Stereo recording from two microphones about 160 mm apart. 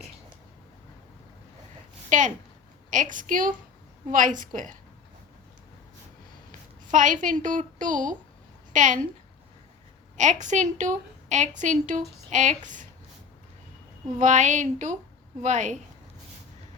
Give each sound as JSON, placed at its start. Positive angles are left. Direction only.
{"t": 2.0, "sound": "a woman's voice", "side_deg": -50}
{"t": 6.8, "sound": "a woman's voice", "side_deg": -55}
{"t": 10.2, "sound": "a woman's voice", "side_deg": -50}
{"t": 14.2, "sound": "a woman's voice", "side_deg": -50}